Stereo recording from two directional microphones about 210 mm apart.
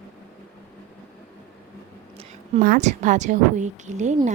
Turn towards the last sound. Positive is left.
turn(degrees=-35)  # may be behind; listen again after turning